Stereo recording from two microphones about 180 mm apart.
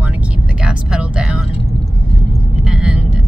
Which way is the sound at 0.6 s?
5° right (ahead or behind).